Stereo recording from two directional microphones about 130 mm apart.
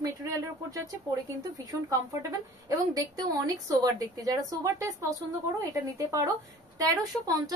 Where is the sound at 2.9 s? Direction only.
30° right (ahead or behind).